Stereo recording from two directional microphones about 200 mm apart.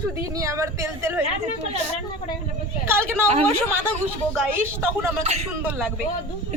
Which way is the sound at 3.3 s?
35° right (ahead or behind).